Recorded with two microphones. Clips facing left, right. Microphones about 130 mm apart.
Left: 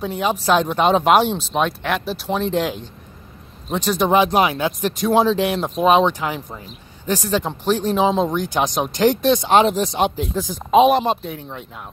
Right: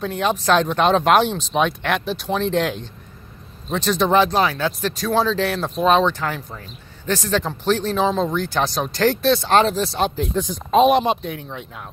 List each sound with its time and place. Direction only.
0.0 s speech: 5° left (ahead or behind)